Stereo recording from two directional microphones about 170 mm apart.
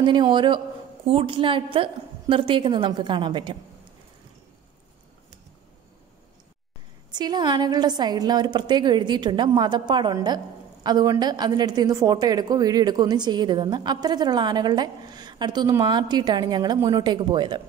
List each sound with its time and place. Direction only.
0.0 s a woman's voice: 25° right (ahead or behind)
7.1 s a woman's voice: 25° right (ahead or behind)